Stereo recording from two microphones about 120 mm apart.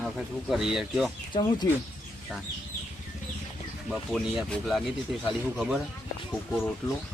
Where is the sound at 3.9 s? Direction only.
Centre (ahead or behind).